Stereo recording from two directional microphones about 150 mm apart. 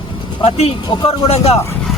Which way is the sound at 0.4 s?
45° left (ahead or behind).